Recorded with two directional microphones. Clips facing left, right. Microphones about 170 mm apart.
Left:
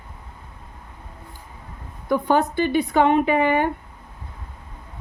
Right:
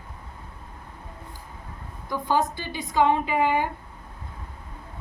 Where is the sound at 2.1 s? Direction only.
60° left (ahead or behind).